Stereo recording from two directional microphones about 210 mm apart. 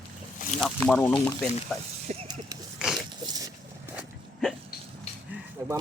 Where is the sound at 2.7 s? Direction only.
Centre (ahead or behind).